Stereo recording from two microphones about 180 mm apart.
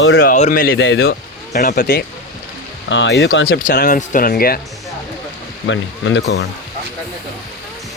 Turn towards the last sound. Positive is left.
turn(degrees=80)